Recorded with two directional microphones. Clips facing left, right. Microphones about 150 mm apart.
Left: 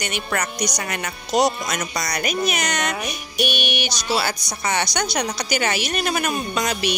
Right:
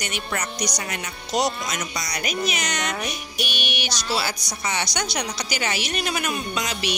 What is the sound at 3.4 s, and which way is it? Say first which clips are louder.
Music: left 7 dB; 55° left (ahead or behind).